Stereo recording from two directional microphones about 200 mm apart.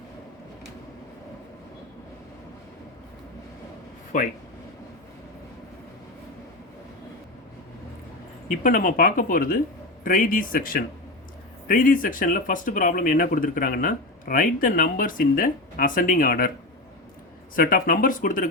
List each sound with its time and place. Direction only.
4.1 s speech: 40° left (ahead or behind)
8.4 s speech: 40° left (ahead or behind)
17.5 s speech: 45° left (ahead or behind)